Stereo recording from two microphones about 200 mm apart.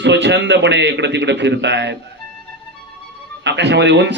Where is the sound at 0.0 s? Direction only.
60° right (ahead or behind).